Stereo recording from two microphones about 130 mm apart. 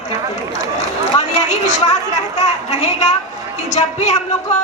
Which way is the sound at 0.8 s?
60° left (ahead or behind).